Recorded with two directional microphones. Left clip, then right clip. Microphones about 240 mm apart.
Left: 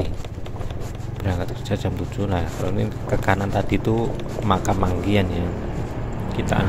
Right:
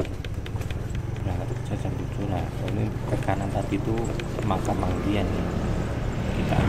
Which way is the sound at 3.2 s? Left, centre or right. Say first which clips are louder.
Left 8 dB; left.